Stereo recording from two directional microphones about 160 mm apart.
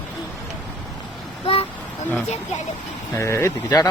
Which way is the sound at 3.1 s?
20° left (ahead or behind).